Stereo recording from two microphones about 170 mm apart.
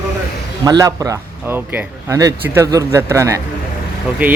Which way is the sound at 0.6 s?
20° right (ahead or behind).